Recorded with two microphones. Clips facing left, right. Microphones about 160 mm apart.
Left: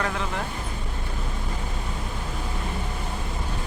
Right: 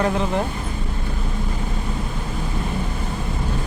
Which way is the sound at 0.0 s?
25° right (ahead or behind).